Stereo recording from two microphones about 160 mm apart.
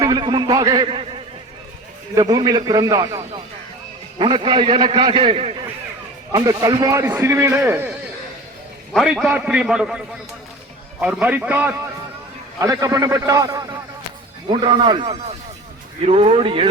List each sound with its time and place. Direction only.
0.0 s a man's voice: 25° right (ahead or behind)
6.3 s a man's voice: 25° right (ahead or behind)
8.9 s a man's voice: centre (ahead or behind)
11.0 s a man's voice: 10° right (ahead or behind)
12.5 s a man's voice: 20° right (ahead or behind)